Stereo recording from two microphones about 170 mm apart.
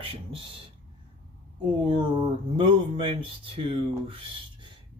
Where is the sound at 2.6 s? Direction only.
30° right (ahead or behind).